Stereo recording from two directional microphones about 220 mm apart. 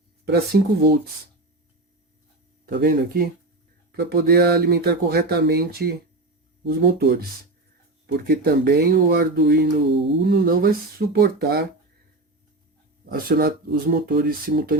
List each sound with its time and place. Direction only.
0.3 s speech: 45° right (ahead or behind)
2.6 s speech: 40° right (ahead or behind)
13.1 s speech: 45° right (ahead or behind)